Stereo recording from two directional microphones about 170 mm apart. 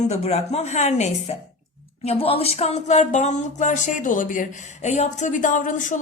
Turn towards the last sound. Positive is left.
turn(degrees=50)  # may be behind; listen again after turning